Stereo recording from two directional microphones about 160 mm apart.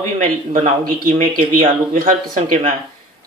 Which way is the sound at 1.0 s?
60° right (ahead or behind).